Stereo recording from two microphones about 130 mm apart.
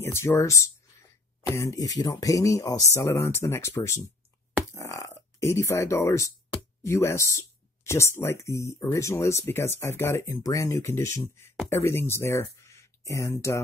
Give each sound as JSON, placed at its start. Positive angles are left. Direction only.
{"t": 0.0, "sound": "speech", "side_deg": 20}